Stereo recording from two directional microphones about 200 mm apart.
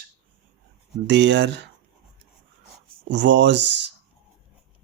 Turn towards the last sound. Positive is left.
turn(degrees=-60)  # may be behind; listen again after turning